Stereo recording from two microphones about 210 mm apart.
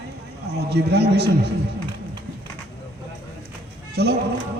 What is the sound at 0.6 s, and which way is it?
Speech, 50° right (ahead or behind).